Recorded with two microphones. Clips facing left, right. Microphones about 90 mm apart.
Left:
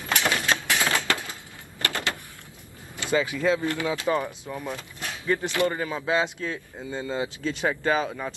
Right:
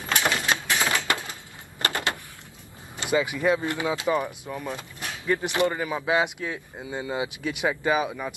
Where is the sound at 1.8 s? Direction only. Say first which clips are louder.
Right 2 dB; 20° right (ahead or behind).